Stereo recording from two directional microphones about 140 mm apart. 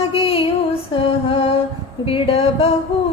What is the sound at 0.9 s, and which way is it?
Music, 45° left (ahead or behind).